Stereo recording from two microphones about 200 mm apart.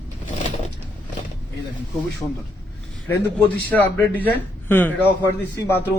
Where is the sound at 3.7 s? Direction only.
10° left (ahead or behind).